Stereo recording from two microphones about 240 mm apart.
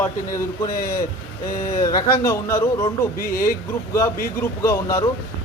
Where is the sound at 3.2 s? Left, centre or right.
Left.